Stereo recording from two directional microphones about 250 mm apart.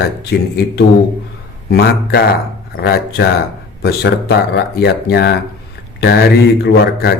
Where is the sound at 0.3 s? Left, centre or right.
Left.